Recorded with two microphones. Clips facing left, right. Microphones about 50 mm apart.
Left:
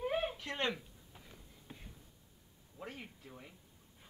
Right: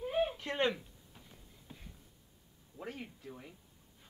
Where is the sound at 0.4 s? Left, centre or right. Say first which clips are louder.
Right 4 dB; centre.